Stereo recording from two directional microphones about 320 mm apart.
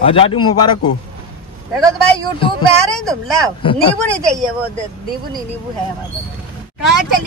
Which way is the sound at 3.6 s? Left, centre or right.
Centre.